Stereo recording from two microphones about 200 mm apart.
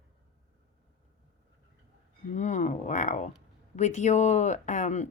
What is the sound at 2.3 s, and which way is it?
Speech, 35° left (ahead or behind).